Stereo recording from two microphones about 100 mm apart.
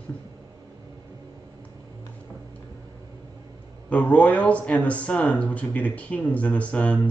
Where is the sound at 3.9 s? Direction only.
15° left (ahead or behind).